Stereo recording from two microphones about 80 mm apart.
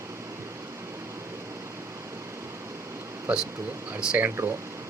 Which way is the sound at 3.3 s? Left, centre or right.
Centre.